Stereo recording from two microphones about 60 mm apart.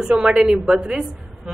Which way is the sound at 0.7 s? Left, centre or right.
Centre.